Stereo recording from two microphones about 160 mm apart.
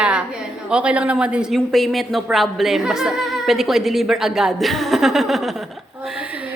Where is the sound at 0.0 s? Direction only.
5° right (ahead or behind).